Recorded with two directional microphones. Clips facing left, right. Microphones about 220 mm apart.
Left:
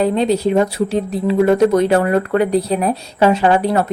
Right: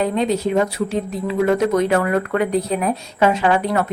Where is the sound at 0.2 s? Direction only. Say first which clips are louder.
Left 3 dB; 35° left (ahead or behind).